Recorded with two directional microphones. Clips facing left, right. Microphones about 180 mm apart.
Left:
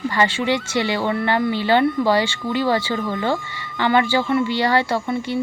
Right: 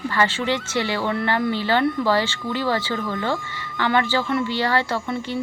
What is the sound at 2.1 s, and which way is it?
A woman's voice, 15° left (ahead or behind).